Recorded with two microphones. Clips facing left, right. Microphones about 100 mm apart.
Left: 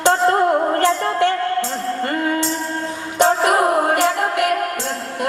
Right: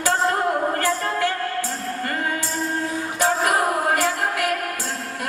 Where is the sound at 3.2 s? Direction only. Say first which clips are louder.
Left 6 dB; 25° left (ahead or behind).